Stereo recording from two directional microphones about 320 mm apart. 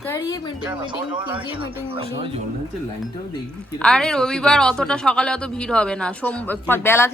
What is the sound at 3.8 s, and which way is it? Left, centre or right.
A woman's voice, centre.